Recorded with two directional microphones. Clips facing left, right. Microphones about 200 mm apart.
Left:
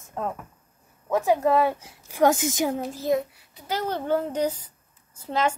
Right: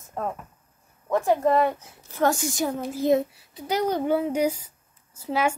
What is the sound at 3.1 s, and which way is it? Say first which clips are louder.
A child's voice: right 3 dB; 20° right (ahead or behind).